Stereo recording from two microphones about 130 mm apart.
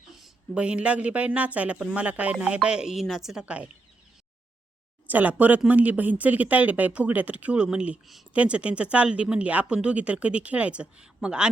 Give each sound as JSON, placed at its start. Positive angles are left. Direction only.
{"t": 0.2, "sound": "speech", "side_deg": -10}
{"t": 5.0, "sound": "speech", "side_deg": -15}